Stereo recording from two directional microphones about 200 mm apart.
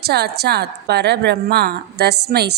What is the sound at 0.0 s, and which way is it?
A woman's voice, 55° right (ahead or behind).